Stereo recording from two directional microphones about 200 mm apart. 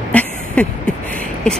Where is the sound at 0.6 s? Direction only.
5° left (ahead or behind).